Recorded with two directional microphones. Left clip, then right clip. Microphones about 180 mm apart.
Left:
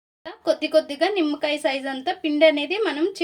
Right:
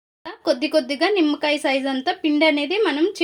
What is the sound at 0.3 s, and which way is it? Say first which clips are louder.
Speech: right 1 dB; 35° right (ahead or behind).